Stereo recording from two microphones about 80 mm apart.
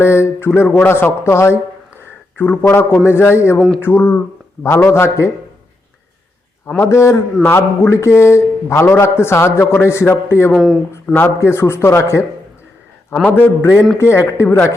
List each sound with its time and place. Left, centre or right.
0.0 s a man's voice: left
2.4 s a man's voice: centre
2.6 s a man's voice: left
6.7 s a man's voice: left
10.5 s speech: centre
11.0 s speech: centre
11.3 s a man's voice: left
13.2 s a man's voice: left